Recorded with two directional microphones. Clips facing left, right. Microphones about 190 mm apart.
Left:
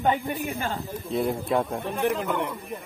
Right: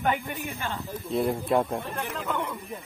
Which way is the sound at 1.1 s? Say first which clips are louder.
Even; centre (ahead or behind).